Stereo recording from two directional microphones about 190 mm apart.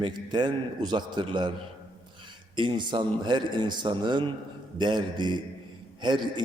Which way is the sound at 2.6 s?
25° right (ahead or behind).